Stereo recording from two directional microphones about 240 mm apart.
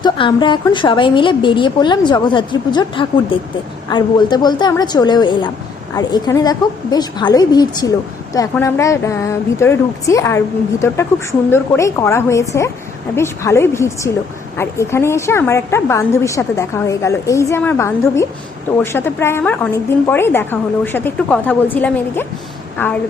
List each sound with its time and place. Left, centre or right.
0.0 s a woman's voice: centre